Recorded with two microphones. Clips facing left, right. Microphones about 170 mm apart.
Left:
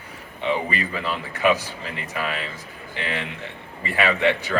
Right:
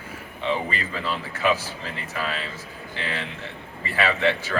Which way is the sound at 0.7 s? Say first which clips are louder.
Left 2 dB; 15° left (ahead or behind).